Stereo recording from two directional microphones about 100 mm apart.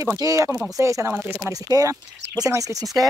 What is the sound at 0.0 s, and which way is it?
Speech, 35° right (ahead or behind).